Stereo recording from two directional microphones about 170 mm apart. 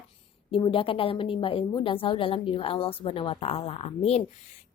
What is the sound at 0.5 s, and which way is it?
A woman's voice, 30° left (ahead or behind).